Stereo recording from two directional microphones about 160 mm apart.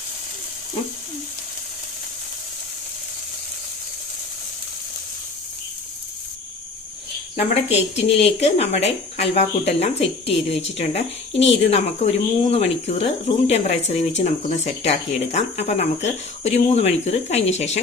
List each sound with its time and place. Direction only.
7.3 s speech: 40° left (ahead or behind)